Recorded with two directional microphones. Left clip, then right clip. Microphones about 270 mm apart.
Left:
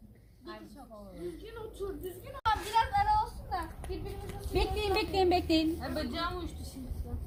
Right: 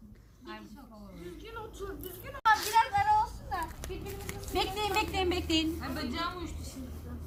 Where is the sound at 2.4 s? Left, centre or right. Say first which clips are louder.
Right 4 dB; centre.